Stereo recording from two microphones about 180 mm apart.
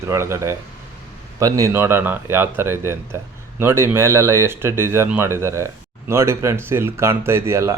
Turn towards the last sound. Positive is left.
turn(degrees=-15)  # may be behind; listen again after turning